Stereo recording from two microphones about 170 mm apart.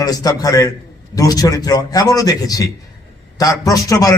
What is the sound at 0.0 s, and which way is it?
A man's voice, 20° left (ahead or behind).